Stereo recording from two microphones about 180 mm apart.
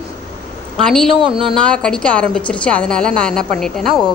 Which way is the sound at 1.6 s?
5° left (ahead or behind).